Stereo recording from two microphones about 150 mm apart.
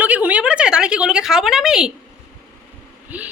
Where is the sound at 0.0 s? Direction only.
10° right (ahead or behind).